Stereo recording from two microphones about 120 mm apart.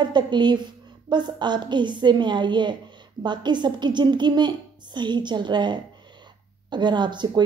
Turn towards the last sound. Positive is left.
turn(degrees=-40)  # may be behind; listen again after turning